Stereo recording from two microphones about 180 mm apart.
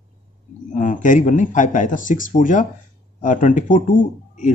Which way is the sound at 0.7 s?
45° left (ahead or behind).